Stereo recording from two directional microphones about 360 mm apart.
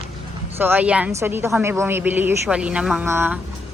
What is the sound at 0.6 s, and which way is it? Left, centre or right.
Speech, centre.